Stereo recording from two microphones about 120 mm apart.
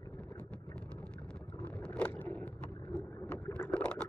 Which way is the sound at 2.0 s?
10° left (ahead or behind).